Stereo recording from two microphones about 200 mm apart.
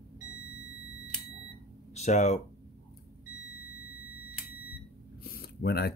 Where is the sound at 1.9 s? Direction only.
35° left (ahead or behind).